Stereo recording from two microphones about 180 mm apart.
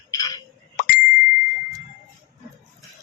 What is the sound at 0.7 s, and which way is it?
Bicycle bell, 55° left (ahead or behind).